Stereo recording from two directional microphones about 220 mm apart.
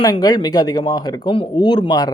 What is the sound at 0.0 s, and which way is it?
Speech, 15° left (ahead or behind).